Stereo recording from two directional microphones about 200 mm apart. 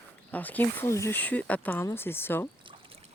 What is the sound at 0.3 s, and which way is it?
Speech, 10° left (ahead or behind).